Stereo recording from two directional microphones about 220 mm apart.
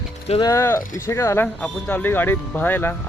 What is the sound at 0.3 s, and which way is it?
Speech, 20° left (ahead or behind).